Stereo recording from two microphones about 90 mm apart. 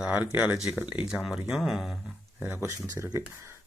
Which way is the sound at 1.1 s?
5° right (ahead or behind).